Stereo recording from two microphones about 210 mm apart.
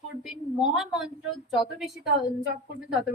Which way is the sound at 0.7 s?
Centre (ahead or behind).